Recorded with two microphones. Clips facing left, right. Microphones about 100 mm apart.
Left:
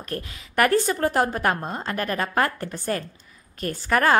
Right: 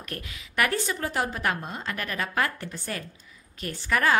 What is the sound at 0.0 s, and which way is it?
Speech, 35° left (ahead or behind).